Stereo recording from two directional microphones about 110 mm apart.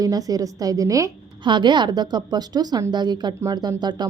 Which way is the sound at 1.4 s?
45° right (ahead or behind).